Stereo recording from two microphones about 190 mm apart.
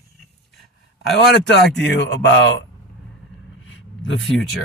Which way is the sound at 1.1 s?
65° left (ahead or behind).